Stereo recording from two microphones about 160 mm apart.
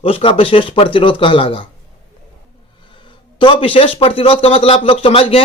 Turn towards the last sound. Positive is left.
turn(degrees=35)  # may be behind; listen again after turning